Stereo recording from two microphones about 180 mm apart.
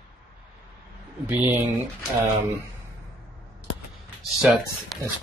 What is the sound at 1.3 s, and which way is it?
Speech, 10° right (ahead or behind).